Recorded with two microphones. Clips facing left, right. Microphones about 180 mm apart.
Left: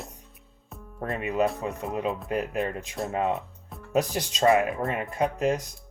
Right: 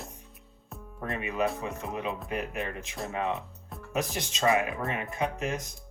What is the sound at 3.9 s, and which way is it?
Speech, 35° left (ahead or behind).